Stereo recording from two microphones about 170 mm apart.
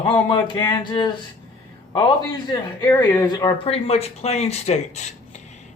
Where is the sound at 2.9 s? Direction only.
20° left (ahead or behind).